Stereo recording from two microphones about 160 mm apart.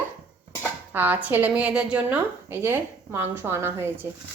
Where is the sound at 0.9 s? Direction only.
10° right (ahead or behind).